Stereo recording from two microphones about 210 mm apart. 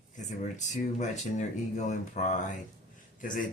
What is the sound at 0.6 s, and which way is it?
Speech, 35° left (ahead or behind).